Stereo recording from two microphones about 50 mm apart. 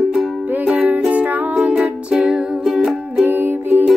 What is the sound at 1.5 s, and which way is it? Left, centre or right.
Music, centre.